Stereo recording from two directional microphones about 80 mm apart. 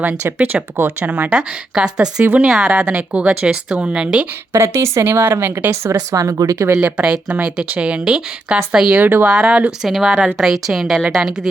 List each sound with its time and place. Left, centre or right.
0.3 s a woman's voice: right
2.5 s speech: centre
4.5 s speech: right
6.8 s a woman's voice: centre